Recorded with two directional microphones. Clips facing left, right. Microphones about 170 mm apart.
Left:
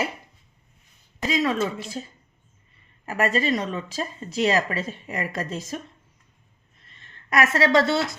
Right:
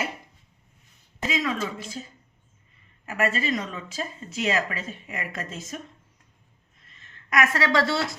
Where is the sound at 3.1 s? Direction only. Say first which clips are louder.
Left 3 dB; 35° left (ahead or behind).